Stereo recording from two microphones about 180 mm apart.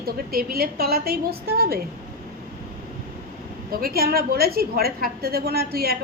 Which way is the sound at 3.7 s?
55° right (ahead or behind).